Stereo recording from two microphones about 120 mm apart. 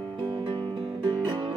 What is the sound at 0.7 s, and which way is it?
Music, 35° right (ahead or behind).